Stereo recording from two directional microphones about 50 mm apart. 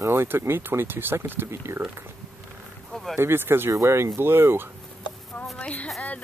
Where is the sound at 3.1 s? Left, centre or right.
Right.